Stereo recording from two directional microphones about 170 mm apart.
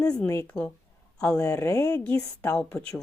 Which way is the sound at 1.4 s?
15° left (ahead or behind).